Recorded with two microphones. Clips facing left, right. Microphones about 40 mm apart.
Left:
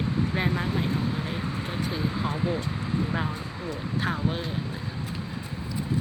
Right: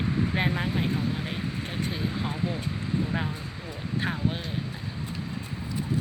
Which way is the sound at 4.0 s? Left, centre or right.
Centre.